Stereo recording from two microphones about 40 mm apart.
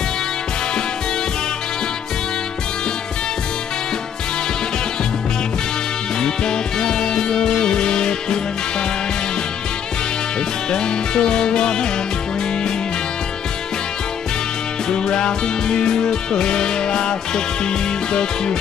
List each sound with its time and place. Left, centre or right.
6.2 s music: centre
10.7 s music: centre
14.9 s music: centre